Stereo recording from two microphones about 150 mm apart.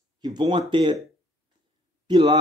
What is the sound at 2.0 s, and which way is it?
Speech, 30° right (ahead or behind).